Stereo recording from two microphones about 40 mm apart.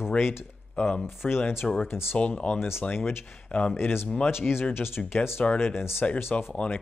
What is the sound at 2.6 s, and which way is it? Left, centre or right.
Speech, left.